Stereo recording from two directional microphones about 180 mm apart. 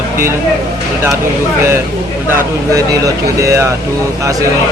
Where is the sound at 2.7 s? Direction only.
20° right (ahead or behind).